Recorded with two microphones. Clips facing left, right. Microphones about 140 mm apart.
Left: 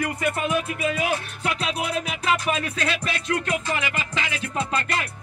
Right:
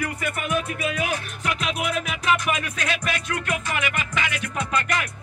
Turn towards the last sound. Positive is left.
turn(degrees=30)  # may be behind; listen again after turning